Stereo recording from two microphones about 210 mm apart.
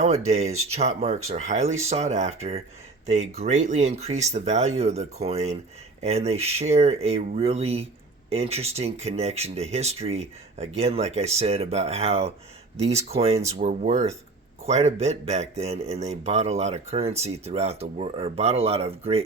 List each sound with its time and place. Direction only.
0.3 s speech: 30° right (ahead or behind)